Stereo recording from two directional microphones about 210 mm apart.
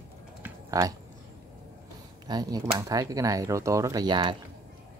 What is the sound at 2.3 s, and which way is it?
Speech, 20° right (ahead or behind).